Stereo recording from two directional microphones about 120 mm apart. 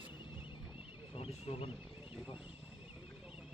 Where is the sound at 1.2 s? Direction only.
55° left (ahead or behind).